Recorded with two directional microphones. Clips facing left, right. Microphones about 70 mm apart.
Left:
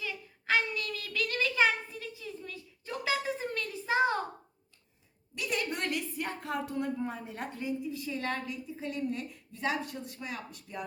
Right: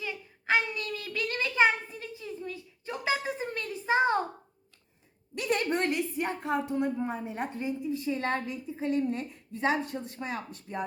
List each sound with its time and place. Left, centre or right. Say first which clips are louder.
0.0 s child singing: right 2 dB; right
5.3 s a woman's voice: right 6 dB; right